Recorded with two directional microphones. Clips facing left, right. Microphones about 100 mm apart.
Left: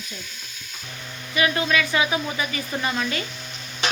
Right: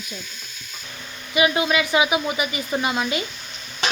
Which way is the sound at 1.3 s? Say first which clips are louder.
Right 2 dB; 15° right (ahead or behind).